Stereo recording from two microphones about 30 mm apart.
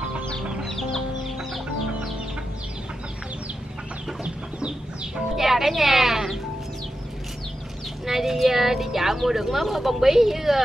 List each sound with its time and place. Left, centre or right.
0.7 s chicken: centre
4.2 s chicken: right
5.1 s speech: centre
8.0 s speech: centre